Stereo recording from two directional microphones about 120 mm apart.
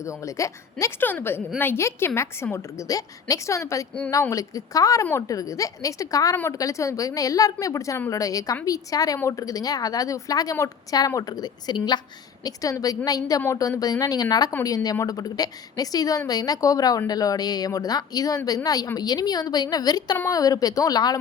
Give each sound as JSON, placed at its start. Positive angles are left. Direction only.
{"t": 0.0, "sound": "a woman's voice", "side_deg": 25}